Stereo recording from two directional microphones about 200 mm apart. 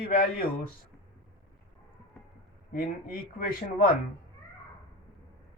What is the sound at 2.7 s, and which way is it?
A man's voice, 45° left (ahead or behind).